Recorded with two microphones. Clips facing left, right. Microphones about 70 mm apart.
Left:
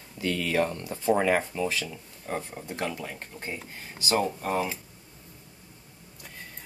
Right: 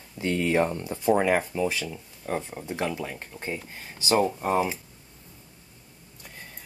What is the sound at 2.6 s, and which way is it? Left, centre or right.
Speech, centre.